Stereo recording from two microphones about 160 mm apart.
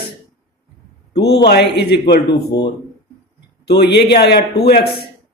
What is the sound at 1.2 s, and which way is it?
A man's voice, 90° left.